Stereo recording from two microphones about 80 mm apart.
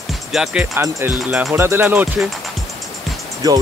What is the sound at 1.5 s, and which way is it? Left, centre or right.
Speech, right.